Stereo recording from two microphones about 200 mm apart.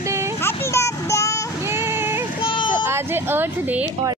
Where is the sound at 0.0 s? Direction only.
15° right (ahead or behind).